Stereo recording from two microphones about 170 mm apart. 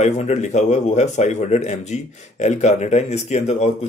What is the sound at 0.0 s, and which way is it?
A man's voice, 45° left (ahead or behind).